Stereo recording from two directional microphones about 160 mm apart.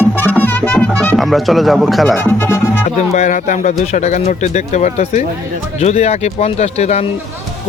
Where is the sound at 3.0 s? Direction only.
45° left (ahead or behind).